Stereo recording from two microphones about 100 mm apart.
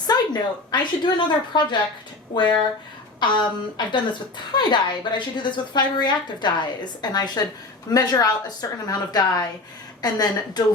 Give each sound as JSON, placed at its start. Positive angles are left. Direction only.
{"t": 0.1, "sound": "a woman's voice", "side_deg": 50}
{"t": 3.2, "sound": "a woman's voice", "side_deg": 50}